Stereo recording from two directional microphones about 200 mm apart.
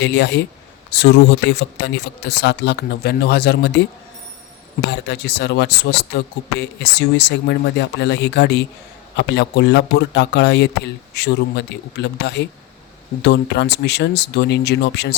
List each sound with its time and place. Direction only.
0.0 s speech: 60° left (ahead or behind)
4.9 s speech: 55° left (ahead or behind)